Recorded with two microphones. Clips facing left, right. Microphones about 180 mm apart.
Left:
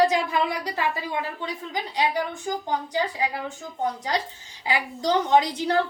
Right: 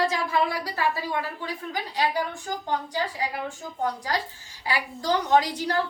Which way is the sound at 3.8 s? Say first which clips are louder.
Left 1 dB; 20° left (ahead or behind).